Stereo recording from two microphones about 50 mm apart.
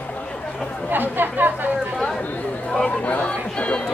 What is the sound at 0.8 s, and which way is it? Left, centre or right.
Speech, right.